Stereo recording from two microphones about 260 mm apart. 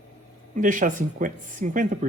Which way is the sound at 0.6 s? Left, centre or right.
Right.